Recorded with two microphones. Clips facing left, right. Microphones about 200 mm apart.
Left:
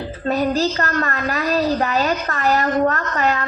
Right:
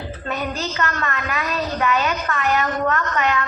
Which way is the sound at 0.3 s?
35° left (ahead or behind).